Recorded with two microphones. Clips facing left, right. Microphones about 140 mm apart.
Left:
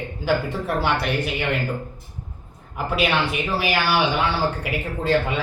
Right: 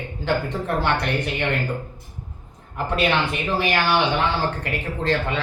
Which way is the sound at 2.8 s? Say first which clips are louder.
Even; 5° left (ahead or behind).